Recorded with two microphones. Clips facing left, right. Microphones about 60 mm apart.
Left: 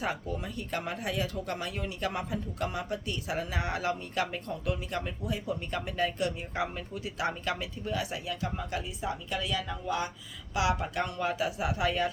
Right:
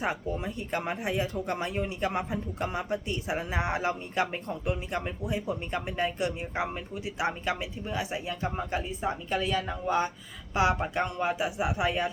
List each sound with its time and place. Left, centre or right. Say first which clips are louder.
0.0 s speech: right 3 dB; right